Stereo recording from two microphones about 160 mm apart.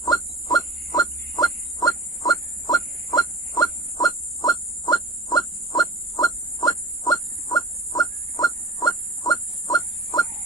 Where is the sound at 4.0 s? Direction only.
25° left (ahead or behind).